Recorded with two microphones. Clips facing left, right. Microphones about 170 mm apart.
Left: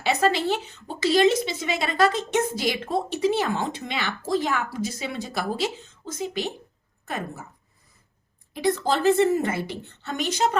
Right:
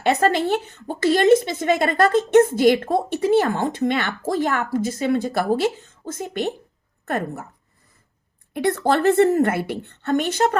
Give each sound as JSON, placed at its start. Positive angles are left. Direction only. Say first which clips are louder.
{"t": 0.0, "sound": "a woman's voice", "louder": "right 4 dB", "side_deg": -50}
{"t": 8.5, "sound": "a woman's voice", "louder": "right 4 dB", "side_deg": -60}